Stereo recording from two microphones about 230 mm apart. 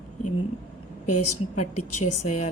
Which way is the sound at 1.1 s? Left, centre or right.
Left.